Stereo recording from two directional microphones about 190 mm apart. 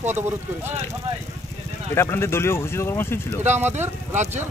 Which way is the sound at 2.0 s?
15° left (ahead or behind).